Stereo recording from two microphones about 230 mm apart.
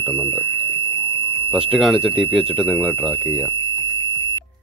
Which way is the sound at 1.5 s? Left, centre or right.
Centre.